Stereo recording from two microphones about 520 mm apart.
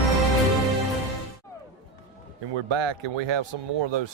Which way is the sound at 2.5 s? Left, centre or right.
Right.